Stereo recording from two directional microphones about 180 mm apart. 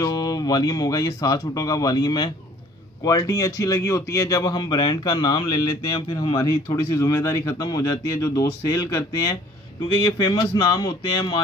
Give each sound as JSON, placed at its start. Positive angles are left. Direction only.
{"t": 0.0, "sound": "a man's voice", "side_deg": 20}